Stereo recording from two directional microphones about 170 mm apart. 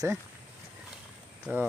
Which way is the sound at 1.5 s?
10° right (ahead or behind).